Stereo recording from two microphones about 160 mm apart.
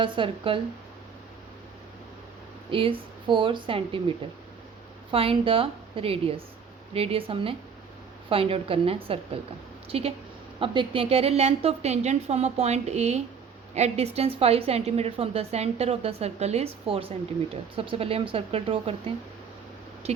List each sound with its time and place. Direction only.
0.0 s a woman's voice: 30° right (ahead or behind)
2.6 s a woman's voice: 35° right (ahead or behind)
5.1 s a woman's voice: 35° right (ahead or behind)